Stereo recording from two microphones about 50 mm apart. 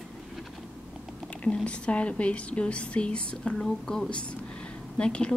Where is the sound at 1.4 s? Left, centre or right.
Left.